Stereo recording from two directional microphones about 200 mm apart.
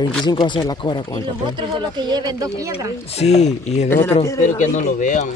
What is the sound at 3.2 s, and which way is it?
Speech, 35° left (ahead or behind).